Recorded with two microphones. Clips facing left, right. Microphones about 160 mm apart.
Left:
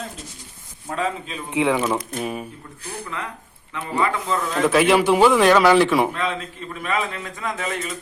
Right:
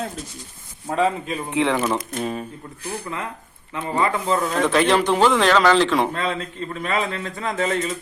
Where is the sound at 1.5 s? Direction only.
10° left (ahead or behind).